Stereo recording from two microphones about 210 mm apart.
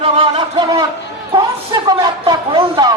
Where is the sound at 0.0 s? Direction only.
25° right (ahead or behind).